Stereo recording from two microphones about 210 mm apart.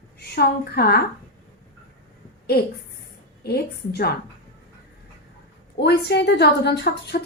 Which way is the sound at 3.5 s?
50° left (ahead or behind).